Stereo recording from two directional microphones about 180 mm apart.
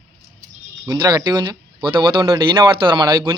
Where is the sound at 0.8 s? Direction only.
20° right (ahead or behind).